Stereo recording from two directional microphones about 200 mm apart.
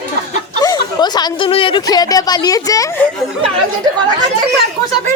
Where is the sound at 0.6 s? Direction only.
20° left (ahead or behind).